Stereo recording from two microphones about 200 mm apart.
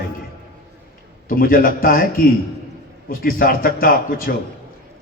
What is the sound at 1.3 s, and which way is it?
A man's voice, 45° left (ahead or behind).